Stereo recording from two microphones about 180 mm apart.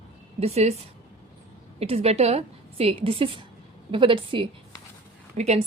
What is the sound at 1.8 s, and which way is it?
A woman's voice, 35° right (ahead or behind).